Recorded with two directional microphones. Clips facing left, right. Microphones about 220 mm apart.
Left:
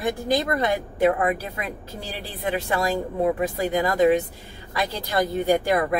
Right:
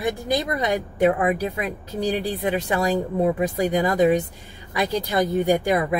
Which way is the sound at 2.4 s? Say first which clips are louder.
Right 2 dB; 15° right (ahead or behind).